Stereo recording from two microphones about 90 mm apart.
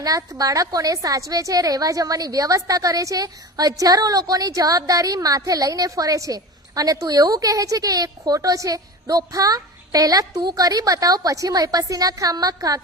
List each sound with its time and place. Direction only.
0.0 s a woman's voice: 40° right (ahead or behind)